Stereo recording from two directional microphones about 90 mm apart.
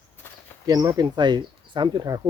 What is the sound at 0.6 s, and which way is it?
Speech, 40° right (ahead or behind).